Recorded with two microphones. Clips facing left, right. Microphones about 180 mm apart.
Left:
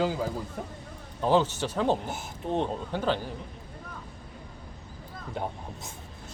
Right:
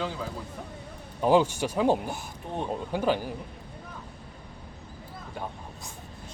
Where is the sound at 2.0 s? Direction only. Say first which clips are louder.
Left 3 dB; 20° left (ahead or behind).